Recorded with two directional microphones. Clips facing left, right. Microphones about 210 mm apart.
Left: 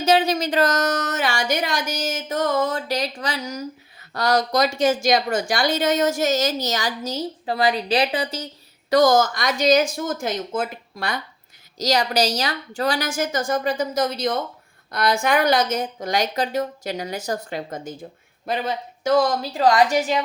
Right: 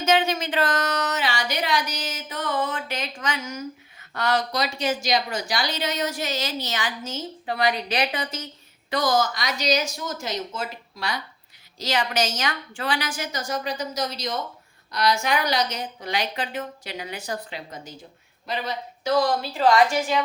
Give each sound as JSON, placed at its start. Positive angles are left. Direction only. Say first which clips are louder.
{"t": 0.0, "sound": "speech", "louder": "left 3 dB", "side_deg": 35}
{"t": 8.9, "sound": "speech", "louder": "left 7 dB", "side_deg": 45}
{"t": 11.8, "sound": "speech", "louder": "left 4 dB", "side_deg": 40}